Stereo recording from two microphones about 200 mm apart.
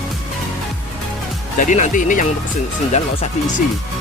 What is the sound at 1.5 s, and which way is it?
Speech, 40° left (ahead or behind).